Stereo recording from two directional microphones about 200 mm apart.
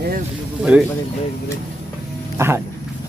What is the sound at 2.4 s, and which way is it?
Speech, 10° right (ahead or behind).